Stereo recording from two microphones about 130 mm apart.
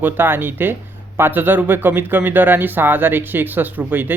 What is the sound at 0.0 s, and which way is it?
A man's voice, 15° right (ahead or behind).